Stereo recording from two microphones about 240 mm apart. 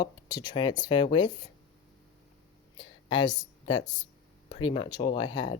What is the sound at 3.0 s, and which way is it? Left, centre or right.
Speech, centre.